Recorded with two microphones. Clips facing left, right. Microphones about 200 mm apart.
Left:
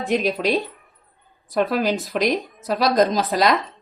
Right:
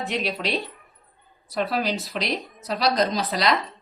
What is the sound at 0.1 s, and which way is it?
Speech, 45° left (ahead or behind).